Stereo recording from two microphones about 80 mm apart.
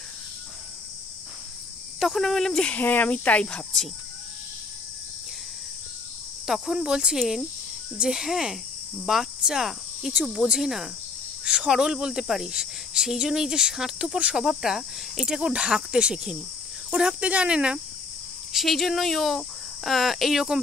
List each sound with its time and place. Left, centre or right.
2.0 s speech: centre
2.7 s speech: left
6.4 s speech: centre
9.0 s cricket: centre
10.2 s speech: centre
18.5 s speech: centre